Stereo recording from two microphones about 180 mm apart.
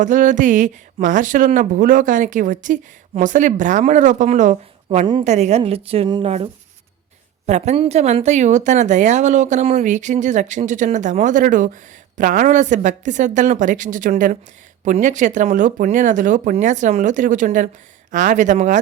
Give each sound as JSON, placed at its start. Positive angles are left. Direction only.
{"t": 0.0, "sound": "a woman's voice", "side_deg": -45}